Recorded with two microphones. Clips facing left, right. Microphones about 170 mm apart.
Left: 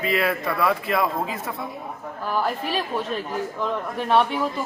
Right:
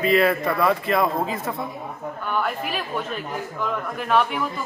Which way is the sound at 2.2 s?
35° left (ahead or behind).